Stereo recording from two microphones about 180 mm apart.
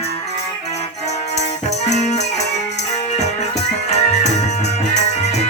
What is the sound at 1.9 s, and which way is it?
Music, 40° left (ahead or behind).